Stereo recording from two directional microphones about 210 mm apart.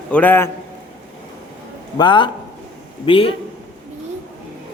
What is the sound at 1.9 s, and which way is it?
A man's voice, 20° left (ahead or behind).